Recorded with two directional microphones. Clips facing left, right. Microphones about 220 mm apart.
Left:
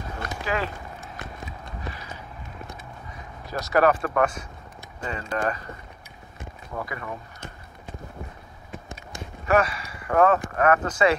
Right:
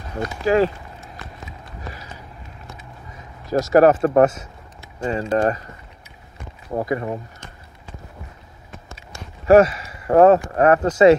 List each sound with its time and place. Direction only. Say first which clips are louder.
0.2 s speech: right 12 dB; 40° right (ahead or behind)
1.9 s a sound: right 1 dB; 40° right (ahead or behind)
3.4 s speech: right 7 dB; 40° right (ahead or behind)
6.7 s speech: right 10 dB; 40° right (ahead or behind)
9.5 s speech: right 10 dB; 25° right (ahead or behind)